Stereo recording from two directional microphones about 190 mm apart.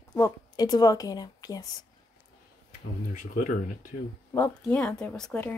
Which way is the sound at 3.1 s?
45° left (ahead or behind).